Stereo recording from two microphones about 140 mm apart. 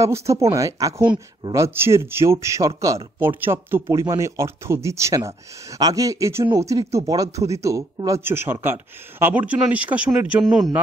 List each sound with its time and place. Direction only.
0.0 s speech: 20° right (ahead or behind); by 10.7 s 5° right (ahead or behind)